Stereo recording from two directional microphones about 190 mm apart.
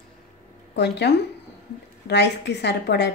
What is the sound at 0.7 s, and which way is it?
A woman's voice, 65° left (ahead or behind).